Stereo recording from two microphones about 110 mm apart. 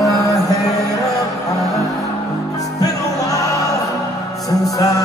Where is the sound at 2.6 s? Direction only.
35° left (ahead or behind).